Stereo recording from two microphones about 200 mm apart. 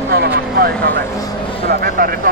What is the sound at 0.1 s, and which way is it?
Vehicle, 50° right (ahead or behind).